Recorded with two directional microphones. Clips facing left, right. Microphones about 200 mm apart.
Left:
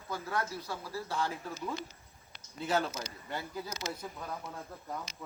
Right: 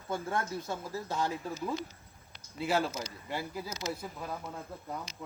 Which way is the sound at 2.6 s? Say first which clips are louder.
Right 1 dB; 5° right (ahead or behind).